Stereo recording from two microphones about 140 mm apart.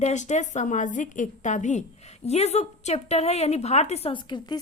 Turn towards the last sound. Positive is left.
turn(degrees=35)  # may be behind; listen again after turning